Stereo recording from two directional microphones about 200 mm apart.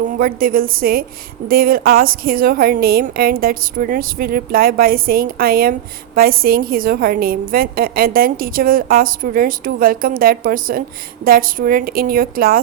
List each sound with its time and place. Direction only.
0.0 s a woman's voice: 45° right (ahead or behind)